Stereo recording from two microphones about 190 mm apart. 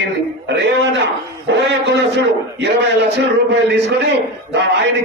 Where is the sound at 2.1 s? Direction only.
65° right (ahead or behind).